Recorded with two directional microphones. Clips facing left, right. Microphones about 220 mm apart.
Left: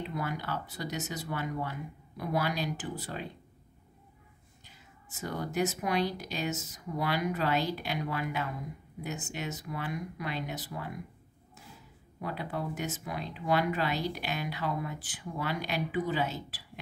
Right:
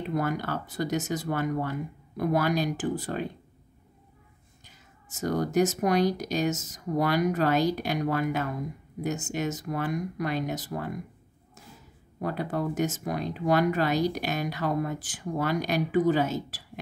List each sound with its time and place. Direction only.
0.0 s speech: 45° right (ahead or behind)
5.1 s speech: 45° right (ahead or behind)
12.2 s speech: 45° right (ahead or behind)